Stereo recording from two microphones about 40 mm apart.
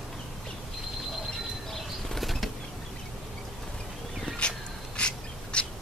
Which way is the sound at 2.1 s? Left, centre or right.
Centre.